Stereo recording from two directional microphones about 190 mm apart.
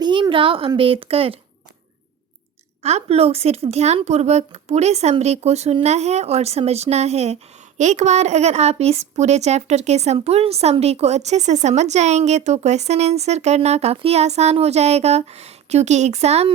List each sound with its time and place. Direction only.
0.0 s a woman's voice: 25° right (ahead or behind)
2.8 s a woman's voice: 35° right (ahead or behind)